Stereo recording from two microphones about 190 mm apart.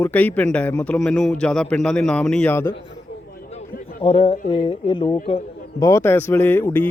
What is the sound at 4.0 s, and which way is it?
Speech, 30° left (ahead or behind).